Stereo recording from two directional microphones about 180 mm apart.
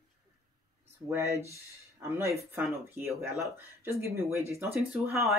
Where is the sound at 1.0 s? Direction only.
15° right (ahead or behind).